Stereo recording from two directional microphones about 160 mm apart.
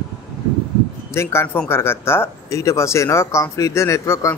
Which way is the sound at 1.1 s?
15° left (ahead or behind).